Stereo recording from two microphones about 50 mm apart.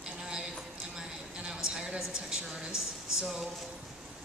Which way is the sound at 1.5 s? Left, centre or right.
Centre.